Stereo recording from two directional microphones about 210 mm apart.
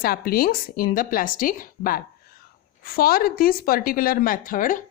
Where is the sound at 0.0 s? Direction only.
45° left (ahead or behind).